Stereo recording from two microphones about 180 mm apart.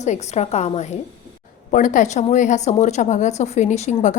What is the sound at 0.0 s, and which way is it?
A woman's voice, 40° left (ahead or behind).